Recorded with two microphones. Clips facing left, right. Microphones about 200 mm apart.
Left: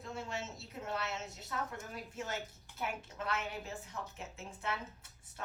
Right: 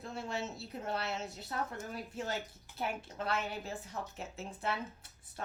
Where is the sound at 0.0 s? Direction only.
35° right (ahead or behind).